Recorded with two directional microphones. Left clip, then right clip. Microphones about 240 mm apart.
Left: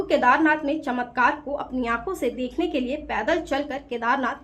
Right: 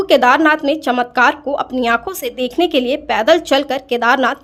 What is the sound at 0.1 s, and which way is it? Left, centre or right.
Speech, right.